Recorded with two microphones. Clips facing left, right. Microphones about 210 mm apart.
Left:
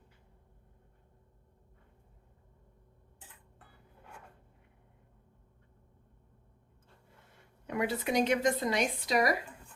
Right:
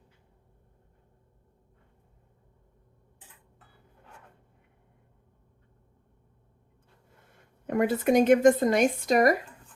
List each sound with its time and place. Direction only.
7.7 s speech: 50° right (ahead or behind)